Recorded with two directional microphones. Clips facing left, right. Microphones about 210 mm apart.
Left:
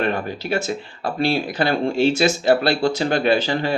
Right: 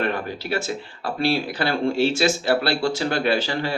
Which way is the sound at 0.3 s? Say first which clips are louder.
Left 3 dB; 20° left (ahead or behind).